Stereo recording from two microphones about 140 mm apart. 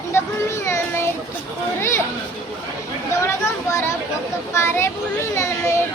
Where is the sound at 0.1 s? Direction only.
20° left (ahead or behind).